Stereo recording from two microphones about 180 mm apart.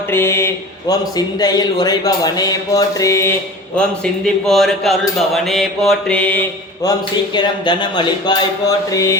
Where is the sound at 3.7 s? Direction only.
5° left (ahead or behind).